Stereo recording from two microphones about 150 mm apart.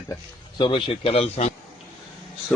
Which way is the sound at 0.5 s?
35° left (ahead or behind).